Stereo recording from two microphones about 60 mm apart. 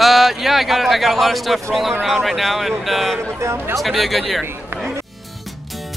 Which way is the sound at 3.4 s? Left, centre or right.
Right.